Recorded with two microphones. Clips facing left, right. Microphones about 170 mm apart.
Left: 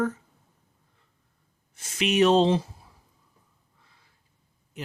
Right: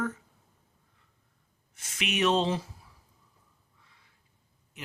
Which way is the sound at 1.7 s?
35° left (ahead or behind).